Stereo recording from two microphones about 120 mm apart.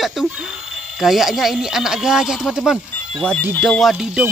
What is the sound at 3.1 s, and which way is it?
Speech, 10° left (ahead or behind).